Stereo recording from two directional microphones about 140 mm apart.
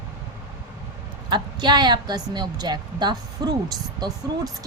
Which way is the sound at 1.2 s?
30° right (ahead or behind).